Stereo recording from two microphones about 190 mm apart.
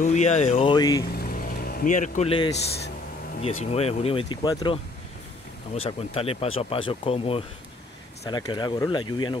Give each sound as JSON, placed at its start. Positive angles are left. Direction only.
{"t": 0.0, "sound": "speech", "side_deg": 40}
{"t": 0.7, "sound": "speech", "side_deg": 20}
{"t": 1.1, "sound": "vehicle", "side_deg": 50}
{"t": 2.5, "sound": "speech", "side_deg": 60}
{"t": 3.7, "sound": "speech", "side_deg": 30}
{"t": 5.9, "sound": "speech", "side_deg": 30}